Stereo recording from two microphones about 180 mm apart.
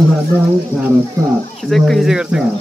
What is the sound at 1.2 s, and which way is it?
Speech, 20° right (ahead or behind).